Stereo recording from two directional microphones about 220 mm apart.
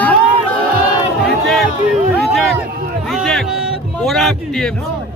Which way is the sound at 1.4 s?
Centre (ahead or behind).